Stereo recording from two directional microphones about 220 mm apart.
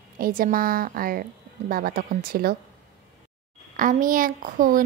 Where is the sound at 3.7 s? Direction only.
40° right (ahead or behind).